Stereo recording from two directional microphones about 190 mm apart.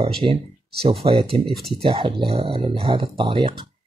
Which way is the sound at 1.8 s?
30° right (ahead or behind).